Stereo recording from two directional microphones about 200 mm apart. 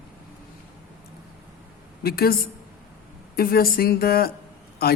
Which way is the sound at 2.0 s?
50° left (ahead or behind).